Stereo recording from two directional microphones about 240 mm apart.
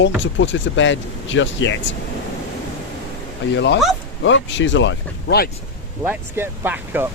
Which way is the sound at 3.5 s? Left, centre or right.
Left.